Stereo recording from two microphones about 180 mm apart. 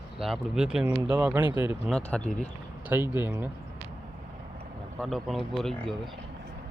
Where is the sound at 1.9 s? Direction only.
5° left (ahead or behind).